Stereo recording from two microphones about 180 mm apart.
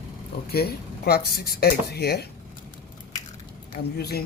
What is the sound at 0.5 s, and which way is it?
Speech, 60° left (ahead or behind).